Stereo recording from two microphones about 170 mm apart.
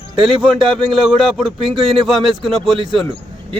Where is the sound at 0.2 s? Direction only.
30° right (ahead or behind).